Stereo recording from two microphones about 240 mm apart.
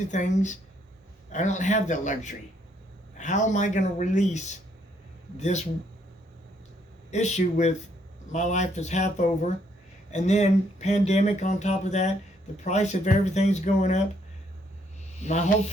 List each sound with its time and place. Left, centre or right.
0.1 s speech: left
7.1 s speech: left
15.2 s speech: left